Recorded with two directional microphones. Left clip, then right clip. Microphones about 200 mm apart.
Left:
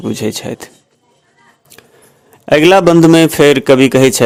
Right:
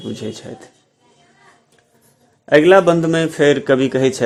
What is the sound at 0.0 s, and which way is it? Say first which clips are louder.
Speech: left 9 dB; 35° left (ahead or behind).